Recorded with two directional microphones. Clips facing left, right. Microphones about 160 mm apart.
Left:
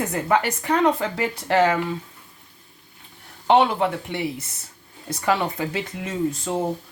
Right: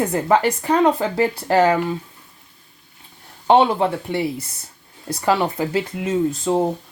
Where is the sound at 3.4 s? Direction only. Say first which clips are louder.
Right 3 dB; 35° right (ahead or behind).